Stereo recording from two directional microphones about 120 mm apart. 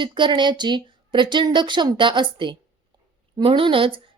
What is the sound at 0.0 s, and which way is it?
A woman's voice, 40° right (ahead or behind).